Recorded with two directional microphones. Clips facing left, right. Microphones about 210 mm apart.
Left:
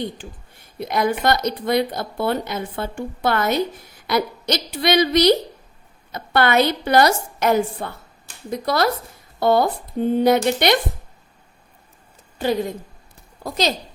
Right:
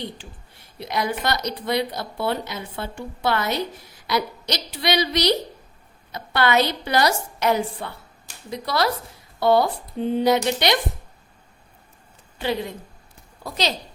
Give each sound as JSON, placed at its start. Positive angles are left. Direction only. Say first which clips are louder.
{"t": 0.8, "sound": "speech", "louder": "left 5 dB", "side_deg": 50}
{"t": 12.4, "sound": "speech", "louder": "left 4 dB", "side_deg": 45}